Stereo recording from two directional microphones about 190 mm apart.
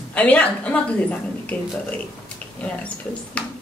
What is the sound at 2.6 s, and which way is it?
Speech, 5° left (ahead or behind).